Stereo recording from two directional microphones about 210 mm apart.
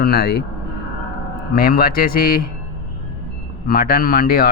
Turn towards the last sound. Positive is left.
turn(degrees=45)  # may be behind; listen again after turning